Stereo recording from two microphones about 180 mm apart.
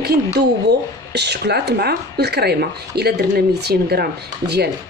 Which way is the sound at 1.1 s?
70° right (ahead or behind).